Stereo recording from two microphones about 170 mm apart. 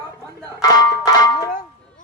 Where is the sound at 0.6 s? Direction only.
25° left (ahead or behind).